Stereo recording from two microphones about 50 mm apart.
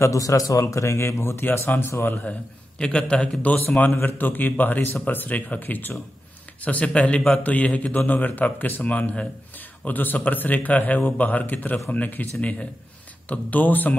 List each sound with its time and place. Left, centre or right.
0.0 s speech: left
2.8 s speech: centre
3.4 s a man's voice: left
9.6 s a man's voice: left